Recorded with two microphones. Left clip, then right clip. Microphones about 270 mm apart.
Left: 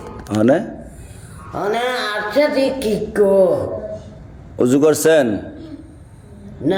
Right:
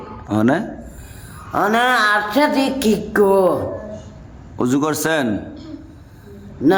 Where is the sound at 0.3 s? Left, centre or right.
Centre.